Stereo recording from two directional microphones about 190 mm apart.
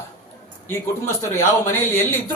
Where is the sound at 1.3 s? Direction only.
10° left (ahead or behind).